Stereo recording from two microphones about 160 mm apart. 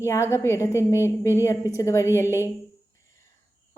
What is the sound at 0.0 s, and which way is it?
A woman's voice, 15° left (ahead or behind).